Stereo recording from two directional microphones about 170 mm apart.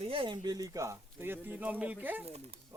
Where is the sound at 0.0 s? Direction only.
30° right (ahead or behind); by 2.2 s 10° right (ahead or behind).